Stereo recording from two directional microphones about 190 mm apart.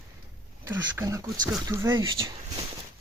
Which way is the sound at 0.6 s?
15° right (ahead or behind).